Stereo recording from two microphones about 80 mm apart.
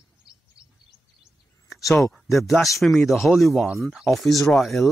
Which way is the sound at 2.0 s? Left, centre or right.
Centre.